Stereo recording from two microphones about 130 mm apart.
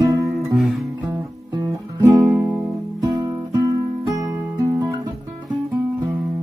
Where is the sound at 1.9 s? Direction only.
25° right (ahead or behind).